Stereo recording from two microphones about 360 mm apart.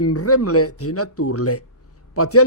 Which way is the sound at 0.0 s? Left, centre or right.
Left.